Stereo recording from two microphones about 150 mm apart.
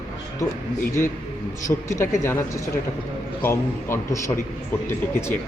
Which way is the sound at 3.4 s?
15° left (ahead or behind).